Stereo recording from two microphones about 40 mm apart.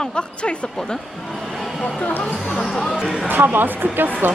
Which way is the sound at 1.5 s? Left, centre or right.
Centre.